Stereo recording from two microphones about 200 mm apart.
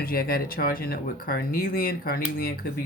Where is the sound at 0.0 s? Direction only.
50° left (ahead or behind).